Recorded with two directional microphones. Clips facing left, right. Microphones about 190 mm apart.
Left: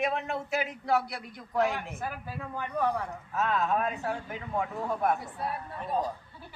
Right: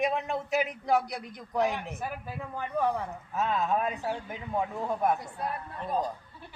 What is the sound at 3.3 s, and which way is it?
Speech, 15° right (ahead or behind).